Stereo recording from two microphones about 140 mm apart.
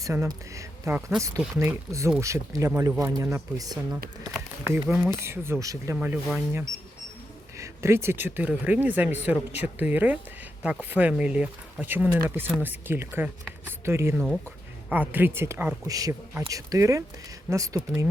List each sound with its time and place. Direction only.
0.0 s speech: 20° right (ahead or behind)